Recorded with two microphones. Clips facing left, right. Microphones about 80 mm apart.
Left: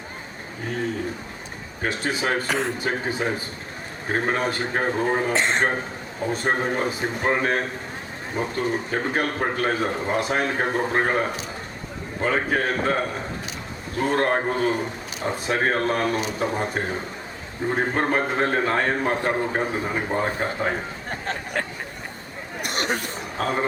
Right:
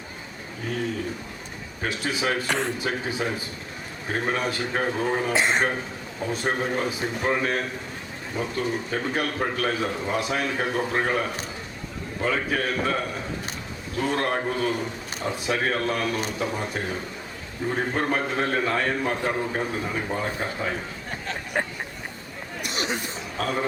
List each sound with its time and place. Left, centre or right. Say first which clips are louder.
1.8 s a man's voice: left 2 dB; left
2.5 s a man's voice: left 1 dB; centre
2.7 s a man's voice: left 2 dB; left
5.3 s speech: even; centre
6.3 s a man's voice: left 2 dB; left
22.6 s chatter: left 3 dB; left
23.4 s a man's voice: left 2 dB; left